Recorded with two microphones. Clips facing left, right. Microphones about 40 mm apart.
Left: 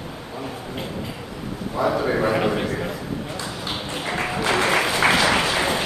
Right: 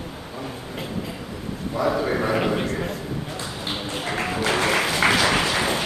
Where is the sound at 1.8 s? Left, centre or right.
Centre.